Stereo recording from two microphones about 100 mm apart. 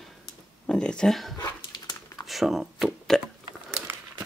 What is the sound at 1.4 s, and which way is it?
Dog, 40° left (ahead or behind).